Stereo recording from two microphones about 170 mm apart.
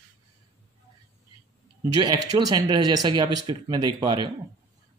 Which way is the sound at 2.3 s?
20° right (ahead or behind).